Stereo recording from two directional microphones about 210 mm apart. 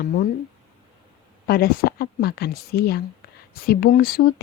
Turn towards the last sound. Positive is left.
turn(degrees=45)  # may be behind; listen again after turning